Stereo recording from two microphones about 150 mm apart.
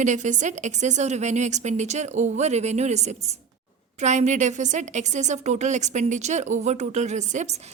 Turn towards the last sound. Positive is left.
turn(degrees=-50)  # may be behind; listen again after turning